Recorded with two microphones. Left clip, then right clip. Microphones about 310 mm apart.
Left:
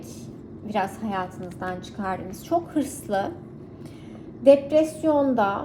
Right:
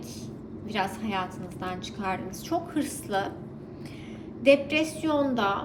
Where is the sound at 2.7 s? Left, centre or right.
Centre.